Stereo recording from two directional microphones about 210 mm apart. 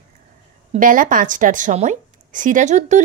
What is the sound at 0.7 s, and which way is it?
A woman's voice, 40° right (ahead or behind).